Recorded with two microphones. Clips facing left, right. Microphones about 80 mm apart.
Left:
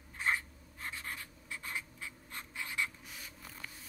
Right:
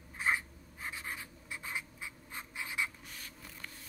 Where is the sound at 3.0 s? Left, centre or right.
Centre.